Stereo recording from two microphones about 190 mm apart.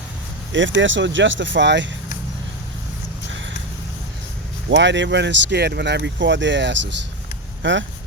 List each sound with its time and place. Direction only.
0.5 s speech: 75° right (ahead or behind)
4.7 s speech: 70° right (ahead or behind)